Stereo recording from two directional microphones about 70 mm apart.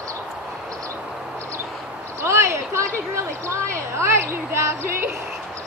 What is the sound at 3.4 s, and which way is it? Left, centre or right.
A woman's voice, right.